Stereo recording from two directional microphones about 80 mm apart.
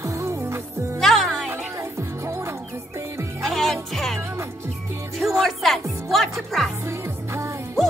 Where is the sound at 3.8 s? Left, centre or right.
Centre.